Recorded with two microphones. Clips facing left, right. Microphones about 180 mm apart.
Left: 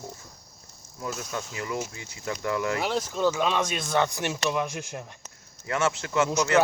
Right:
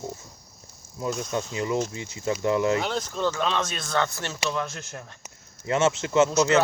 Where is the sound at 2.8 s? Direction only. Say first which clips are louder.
Left 2 dB; 5° left (ahead or behind).